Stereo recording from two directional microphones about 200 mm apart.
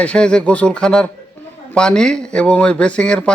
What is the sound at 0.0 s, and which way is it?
Speech, 5° left (ahead or behind).